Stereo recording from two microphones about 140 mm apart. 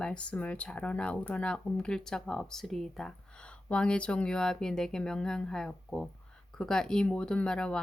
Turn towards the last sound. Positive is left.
turn(degrees=5)  # may be behind; listen again after turning